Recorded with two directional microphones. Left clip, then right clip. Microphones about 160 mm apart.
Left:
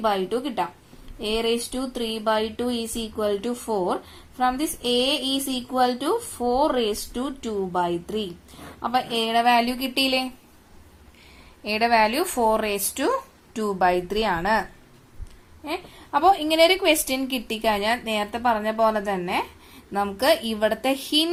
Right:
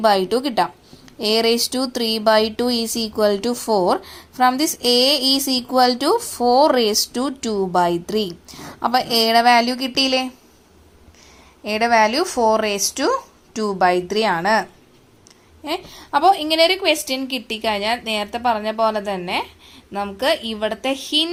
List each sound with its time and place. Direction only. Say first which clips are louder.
0.0 s a woman's voice: right 7 dB; 40° right (ahead or behind); by 10.2 s 20° right (ahead or behind)
11.6 s a woman's voice: right 4 dB; 20° right (ahead or behind); by 21.2 s centre (ahead or behind)